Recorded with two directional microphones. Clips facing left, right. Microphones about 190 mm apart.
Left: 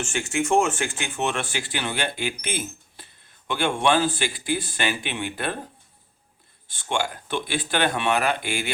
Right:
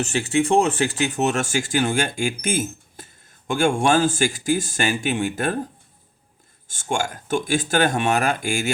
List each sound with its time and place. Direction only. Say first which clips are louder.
0.0 s speech: right 5 dB; 35° right (ahead or behind)
6.7 s speech: right 2 dB; 45° right (ahead or behind)